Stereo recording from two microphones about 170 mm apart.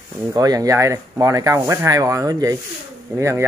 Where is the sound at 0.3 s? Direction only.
20° right (ahead or behind).